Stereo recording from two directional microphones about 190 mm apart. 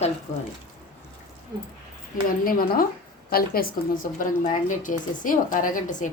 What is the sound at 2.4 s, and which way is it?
A woman's voice, 50° left (ahead or behind).